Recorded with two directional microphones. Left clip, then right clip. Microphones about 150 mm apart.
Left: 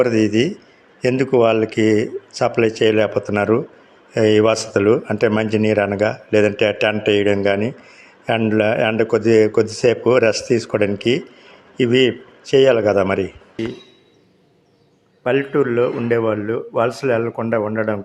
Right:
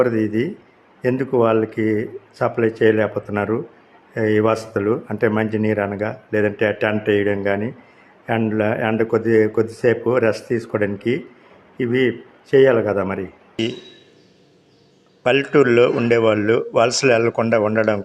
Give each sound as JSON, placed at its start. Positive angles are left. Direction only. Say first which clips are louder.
{"t": 0.0, "sound": "a man's voice", "louder": "left 3 dB", "side_deg": 15}
{"t": 15.2, "sound": "speech", "louder": "right 2 dB", "side_deg": -10}